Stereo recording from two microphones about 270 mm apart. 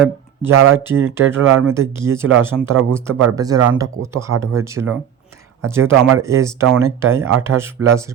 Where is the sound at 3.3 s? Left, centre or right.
Centre.